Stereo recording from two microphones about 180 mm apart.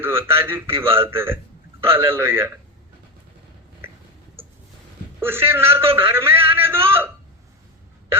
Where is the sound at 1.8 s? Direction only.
10° right (ahead or behind).